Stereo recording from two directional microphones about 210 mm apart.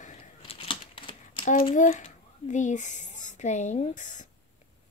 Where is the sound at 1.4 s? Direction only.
30° left (ahead or behind).